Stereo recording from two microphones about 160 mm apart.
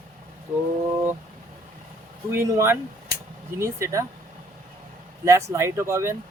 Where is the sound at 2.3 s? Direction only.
15° right (ahead or behind).